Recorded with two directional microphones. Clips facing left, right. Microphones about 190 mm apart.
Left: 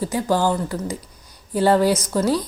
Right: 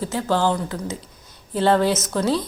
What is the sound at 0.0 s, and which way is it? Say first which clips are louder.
A woman's voice: left 1 dB; 10° left (ahead or behind).